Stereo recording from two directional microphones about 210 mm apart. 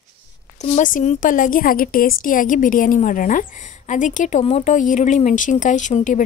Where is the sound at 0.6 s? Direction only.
35° left (ahead or behind).